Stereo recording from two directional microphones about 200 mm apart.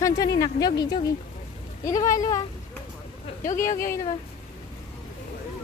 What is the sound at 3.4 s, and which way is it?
Speech, 40° left (ahead or behind).